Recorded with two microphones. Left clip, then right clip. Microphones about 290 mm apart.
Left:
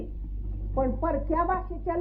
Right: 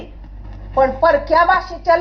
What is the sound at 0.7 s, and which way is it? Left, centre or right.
A child's voice, right.